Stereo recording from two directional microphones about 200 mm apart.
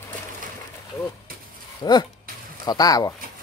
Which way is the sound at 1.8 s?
20° left (ahead or behind).